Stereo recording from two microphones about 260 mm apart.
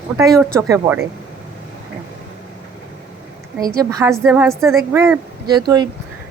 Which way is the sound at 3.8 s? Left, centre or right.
Centre.